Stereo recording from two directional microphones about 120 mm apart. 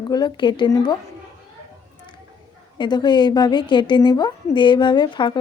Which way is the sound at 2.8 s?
40° left (ahead or behind).